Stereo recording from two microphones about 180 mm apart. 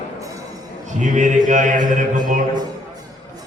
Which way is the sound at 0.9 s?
45° right (ahead or behind).